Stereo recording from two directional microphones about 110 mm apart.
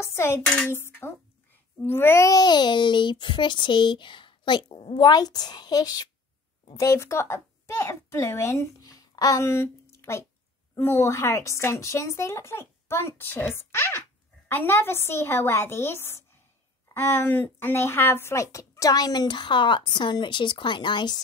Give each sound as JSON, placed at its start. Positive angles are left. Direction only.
{"t": 0.0, "sound": "dishes", "side_deg": 25}
{"t": 0.5, "sound": "a woman's voice", "side_deg": 20}